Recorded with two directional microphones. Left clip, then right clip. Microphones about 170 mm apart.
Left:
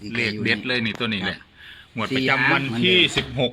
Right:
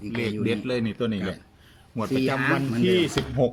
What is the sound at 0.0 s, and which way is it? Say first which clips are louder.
Speech: left 4 dB; centre (ahead or behind).